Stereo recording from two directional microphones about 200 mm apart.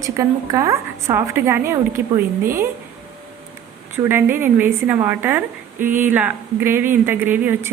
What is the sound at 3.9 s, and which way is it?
Speech, 10° right (ahead or behind).